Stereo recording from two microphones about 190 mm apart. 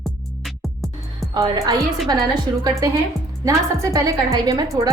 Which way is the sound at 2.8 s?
20° right (ahead or behind).